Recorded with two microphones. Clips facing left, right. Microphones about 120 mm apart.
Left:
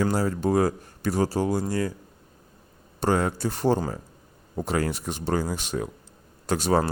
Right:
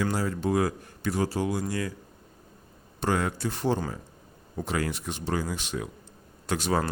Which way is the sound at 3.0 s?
35° left (ahead or behind).